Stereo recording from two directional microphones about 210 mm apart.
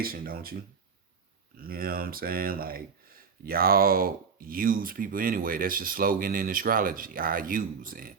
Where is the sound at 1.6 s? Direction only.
45° right (ahead or behind).